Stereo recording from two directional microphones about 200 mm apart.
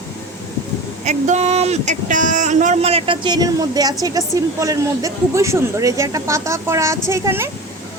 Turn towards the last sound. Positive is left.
turn(degrees=-10)  # may be behind; listen again after turning